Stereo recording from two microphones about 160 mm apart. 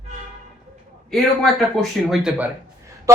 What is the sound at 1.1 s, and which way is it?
Speech, centre (ahead or behind).